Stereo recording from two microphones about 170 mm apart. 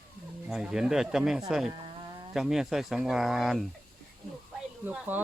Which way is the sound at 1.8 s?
25° right (ahead or behind).